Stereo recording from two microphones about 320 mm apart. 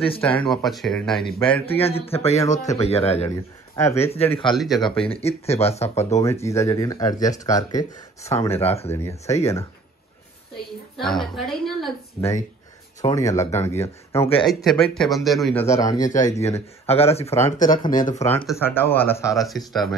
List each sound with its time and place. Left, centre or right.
0.2 s speech: centre
1.2 s speech: centre
3.7 s speech: centre
4.5 s speech: centre
4.8 s speech: centre
6.1 s speech: centre
8.9 s speech: centre
11.0 s speech: centre
16.8 s speech: centre
18.5 s speech: centre